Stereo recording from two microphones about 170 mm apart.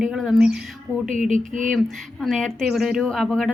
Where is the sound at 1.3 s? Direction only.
50° right (ahead or behind).